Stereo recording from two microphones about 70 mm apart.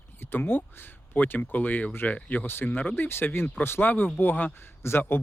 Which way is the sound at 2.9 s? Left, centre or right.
Left.